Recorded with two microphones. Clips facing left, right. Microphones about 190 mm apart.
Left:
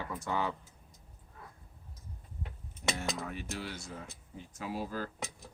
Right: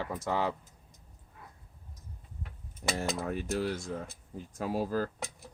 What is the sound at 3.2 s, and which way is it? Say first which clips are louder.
Speech: right 8 dB; 40° right (ahead or behind).